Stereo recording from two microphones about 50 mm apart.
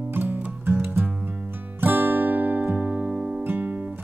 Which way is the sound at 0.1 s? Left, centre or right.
Right.